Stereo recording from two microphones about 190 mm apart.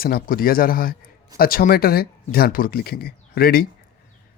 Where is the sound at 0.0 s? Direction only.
50° left (ahead or behind).